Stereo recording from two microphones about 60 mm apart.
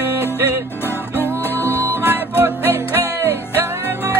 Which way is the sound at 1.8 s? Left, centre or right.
Right.